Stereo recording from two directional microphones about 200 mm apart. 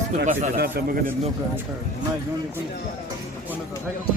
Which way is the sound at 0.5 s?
55° right (ahead or behind).